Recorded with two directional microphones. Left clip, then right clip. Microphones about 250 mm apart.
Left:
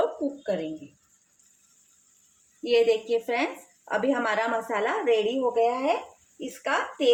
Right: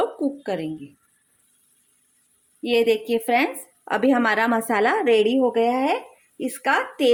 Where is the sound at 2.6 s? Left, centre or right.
Right.